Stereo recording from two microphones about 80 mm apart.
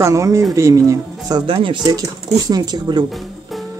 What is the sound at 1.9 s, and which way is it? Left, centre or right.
Speech, right.